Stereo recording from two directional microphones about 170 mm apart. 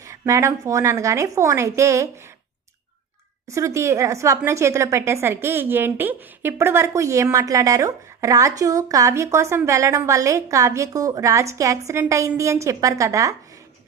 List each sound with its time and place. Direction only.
0.0 s a woman's voice: 20° right (ahead or behind)
3.5 s a woman's voice: 15° right (ahead or behind)